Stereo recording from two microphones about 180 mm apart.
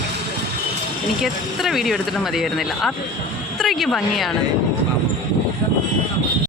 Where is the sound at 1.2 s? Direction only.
Centre (ahead or behind).